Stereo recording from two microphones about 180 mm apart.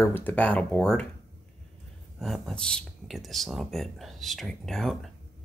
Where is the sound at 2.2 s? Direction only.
Centre (ahead or behind).